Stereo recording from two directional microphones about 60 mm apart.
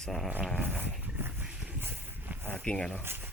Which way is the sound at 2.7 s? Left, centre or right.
Left.